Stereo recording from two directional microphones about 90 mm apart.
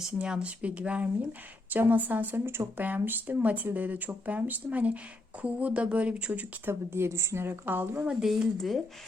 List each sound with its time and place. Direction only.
0.2 s speech: 10° right (ahead or behind)
6.7 s speech: 25° right (ahead or behind)
8.2 s speech: centre (ahead or behind)